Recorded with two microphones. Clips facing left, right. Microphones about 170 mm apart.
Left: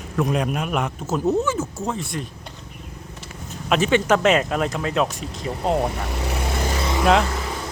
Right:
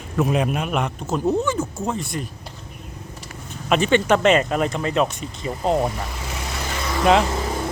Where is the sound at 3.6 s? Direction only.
Centre (ahead or behind).